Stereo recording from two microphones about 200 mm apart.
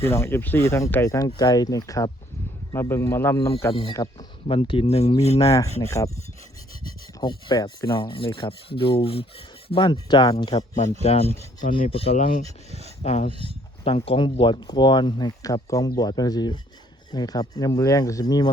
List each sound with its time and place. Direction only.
0.1 s speech: 10° left (ahead or behind); by 5.5 s 30° left (ahead or behind)
5.5 s speech: 15° left (ahead or behind)
7.2 s speech: 20° left (ahead or behind)